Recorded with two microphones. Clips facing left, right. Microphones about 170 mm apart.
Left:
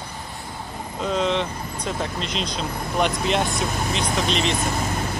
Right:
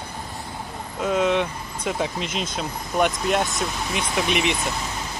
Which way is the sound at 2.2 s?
50° right (ahead or behind).